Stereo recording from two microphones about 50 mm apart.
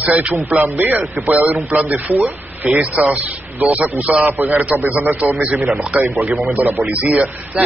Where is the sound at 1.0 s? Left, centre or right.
Right.